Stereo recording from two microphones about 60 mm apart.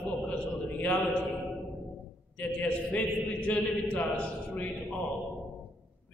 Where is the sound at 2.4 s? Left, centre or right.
Left.